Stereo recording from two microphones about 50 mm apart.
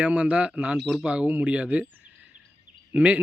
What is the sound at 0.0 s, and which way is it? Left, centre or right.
Speech, right.